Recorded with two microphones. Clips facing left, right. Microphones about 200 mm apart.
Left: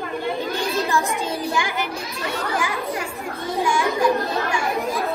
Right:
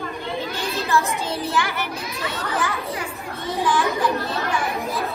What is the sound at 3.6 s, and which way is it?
Children playing, 10° left (ahead or behind).